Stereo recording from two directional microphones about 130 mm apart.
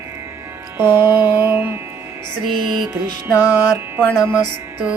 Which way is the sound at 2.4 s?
35° right (ahead or behind).